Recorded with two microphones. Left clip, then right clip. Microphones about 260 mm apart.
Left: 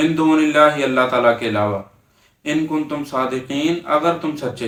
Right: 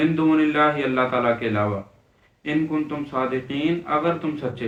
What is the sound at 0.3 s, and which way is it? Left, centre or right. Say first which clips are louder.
Speech: left 6 dB; centre.